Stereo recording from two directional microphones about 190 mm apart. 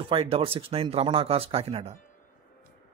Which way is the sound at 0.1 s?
30° right (ahead or behind).